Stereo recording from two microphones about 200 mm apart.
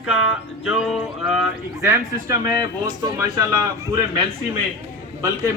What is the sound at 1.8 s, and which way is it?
A man's voice, 15° right (ahead or behind).